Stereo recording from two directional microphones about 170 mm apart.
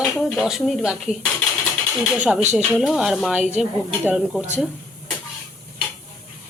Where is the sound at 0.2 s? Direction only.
Centre (ahead or behind).